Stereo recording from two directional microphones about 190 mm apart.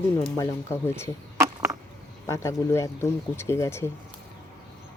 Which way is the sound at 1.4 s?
15° right (ahead or behind).